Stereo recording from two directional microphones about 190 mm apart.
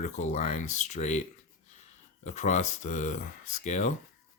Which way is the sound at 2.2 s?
40° left (ahead or behind).